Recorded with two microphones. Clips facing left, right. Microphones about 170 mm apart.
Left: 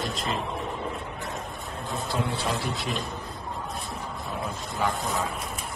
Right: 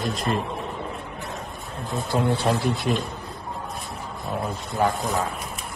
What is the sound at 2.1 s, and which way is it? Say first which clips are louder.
Speech: right 7 dB; 45° right (ahead or behind).